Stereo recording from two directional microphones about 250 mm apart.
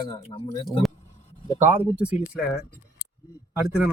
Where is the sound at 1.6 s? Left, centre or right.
Centre.